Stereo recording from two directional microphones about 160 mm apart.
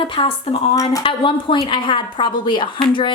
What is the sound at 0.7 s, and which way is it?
Speech, 20° left (ahead or behind).